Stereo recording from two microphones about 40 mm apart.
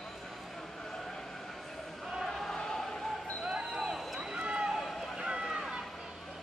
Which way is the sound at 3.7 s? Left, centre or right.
Centre.